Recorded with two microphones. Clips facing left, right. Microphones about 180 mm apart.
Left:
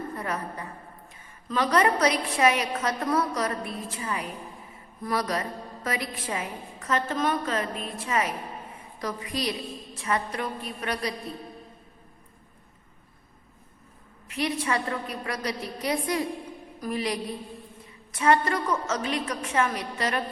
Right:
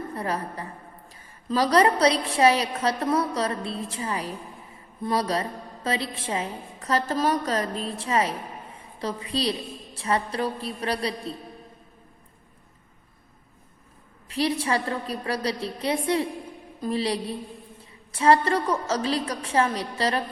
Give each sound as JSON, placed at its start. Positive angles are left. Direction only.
{"t": 0.1, "sound": "a woman's voice", "side_deg": -30}
{"t": 14.3, "sound": "a woman's voice", "side_deg": -30}